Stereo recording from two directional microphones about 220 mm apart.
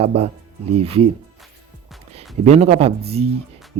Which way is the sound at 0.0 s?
30° right (ahead or behind).